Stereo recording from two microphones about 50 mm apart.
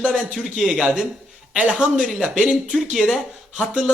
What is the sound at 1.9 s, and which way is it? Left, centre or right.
Speech, centre.